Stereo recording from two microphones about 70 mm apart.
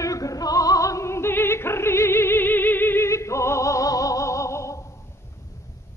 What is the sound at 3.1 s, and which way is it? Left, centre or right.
Music, left.